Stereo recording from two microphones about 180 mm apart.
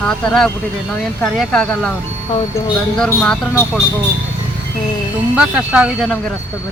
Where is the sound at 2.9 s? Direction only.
5° left (ahead or behind).